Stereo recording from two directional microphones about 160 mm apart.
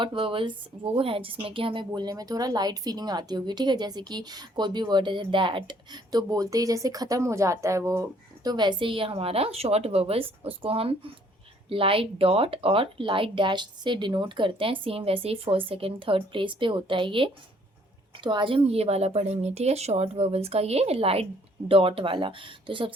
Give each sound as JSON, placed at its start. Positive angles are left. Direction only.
{"t": 0.0, "sound": "a woman's voice", "side_deg": -30}